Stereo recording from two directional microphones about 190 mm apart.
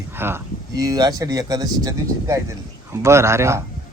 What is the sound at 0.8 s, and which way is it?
Speech, 20° right (ahead or behind).